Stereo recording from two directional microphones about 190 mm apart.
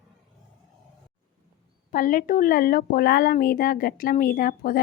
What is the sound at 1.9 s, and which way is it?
Speech, 45° left (ahead or behind).